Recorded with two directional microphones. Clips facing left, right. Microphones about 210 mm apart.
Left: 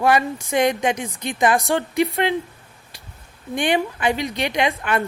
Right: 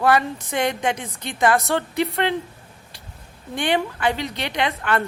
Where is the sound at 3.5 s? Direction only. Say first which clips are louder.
Left 2 dB; 15° left (ahead or behind).